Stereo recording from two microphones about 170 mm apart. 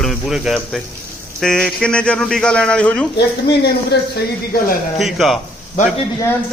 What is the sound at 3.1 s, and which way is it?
Speech, 75° left (ahead or behind).